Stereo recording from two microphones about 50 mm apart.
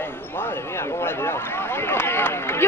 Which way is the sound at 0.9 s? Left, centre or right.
Left.